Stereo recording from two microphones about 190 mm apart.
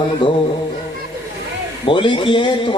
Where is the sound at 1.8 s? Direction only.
25° left (ahead or behind).